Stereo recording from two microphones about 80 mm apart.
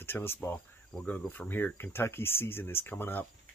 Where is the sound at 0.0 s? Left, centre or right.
Left.